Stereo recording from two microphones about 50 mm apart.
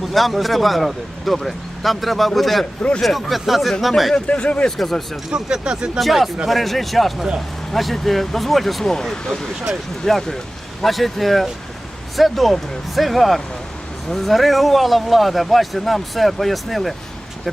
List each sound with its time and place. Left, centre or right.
0.1 s speech: centre
4.1 s speech: left
4.8 s speech: centre
5.3 s speech: centre
6.0 s speech: centre